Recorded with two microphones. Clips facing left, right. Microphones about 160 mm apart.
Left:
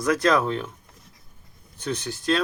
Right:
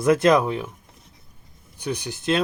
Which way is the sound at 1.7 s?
10° right (ahead or behind).